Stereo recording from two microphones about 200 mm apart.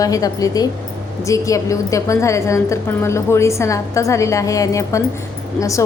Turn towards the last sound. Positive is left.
turn(degrees=15)  # may be behind; listen again after turning